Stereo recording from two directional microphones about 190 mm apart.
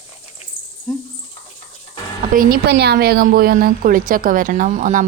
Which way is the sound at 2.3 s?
55° right (ahead or behind).